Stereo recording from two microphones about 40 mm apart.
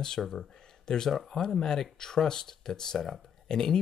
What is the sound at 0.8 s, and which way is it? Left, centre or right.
Speech, centre.